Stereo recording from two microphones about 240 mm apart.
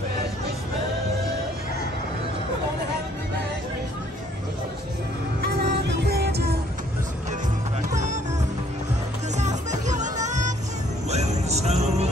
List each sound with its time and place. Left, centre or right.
5.4 s music: right
7.9 s music: right
9.4 s music: right
11.1 s jingle bell: right